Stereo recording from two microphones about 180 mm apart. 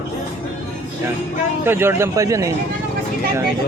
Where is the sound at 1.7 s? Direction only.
15° right (ahead or behind).